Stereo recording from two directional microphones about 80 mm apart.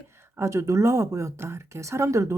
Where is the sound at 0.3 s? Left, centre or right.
Right.